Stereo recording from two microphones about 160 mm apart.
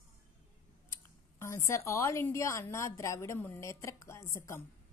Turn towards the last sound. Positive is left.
turn(degrees=15)  # may be behind; listen again after turning